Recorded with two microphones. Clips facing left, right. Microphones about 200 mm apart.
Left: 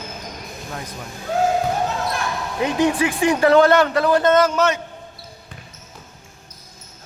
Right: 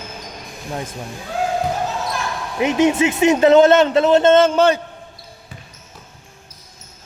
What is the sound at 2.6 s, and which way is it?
Speech, 20° right (ahead or behind).